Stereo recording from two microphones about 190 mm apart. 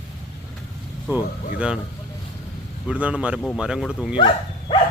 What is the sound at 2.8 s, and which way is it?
Speech, 5° right (ahead or behind).